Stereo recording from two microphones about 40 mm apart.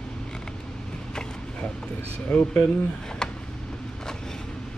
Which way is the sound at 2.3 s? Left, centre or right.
Left.